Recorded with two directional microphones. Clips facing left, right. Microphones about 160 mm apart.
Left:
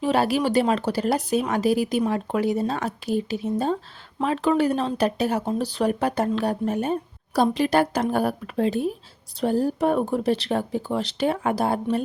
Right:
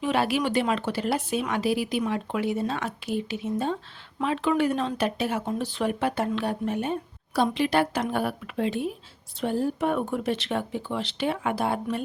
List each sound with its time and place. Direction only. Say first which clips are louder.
0.0 s speech: left 3 dB; 40° left (ahead or behind)